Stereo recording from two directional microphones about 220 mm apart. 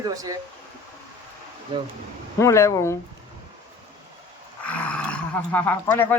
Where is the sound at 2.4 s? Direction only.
15° left (ahead or behind).